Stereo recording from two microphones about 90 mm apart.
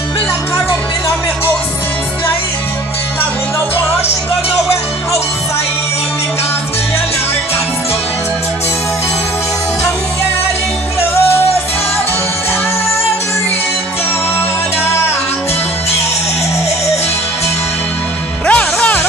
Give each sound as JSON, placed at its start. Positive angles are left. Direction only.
{"t": 18.5, "sound": "music", "side_deg": 15}